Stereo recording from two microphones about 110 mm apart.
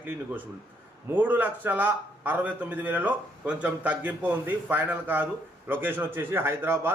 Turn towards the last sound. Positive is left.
turn(degrees=-20)  # may be behind; listen again after turning